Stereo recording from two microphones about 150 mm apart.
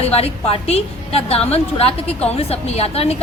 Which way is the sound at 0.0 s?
40° left (ahead or behind).